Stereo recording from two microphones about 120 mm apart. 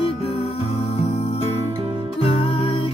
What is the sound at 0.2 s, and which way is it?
Music, 55° left (ahead or behind).